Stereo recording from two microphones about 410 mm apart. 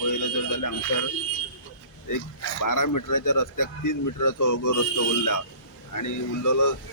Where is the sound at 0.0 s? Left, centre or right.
Left.